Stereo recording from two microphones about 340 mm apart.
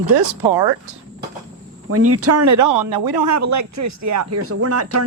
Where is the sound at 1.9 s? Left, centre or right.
Right.